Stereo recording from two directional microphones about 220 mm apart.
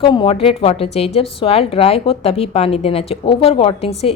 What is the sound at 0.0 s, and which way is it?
A woman's voice, 20° left (ahead or behind).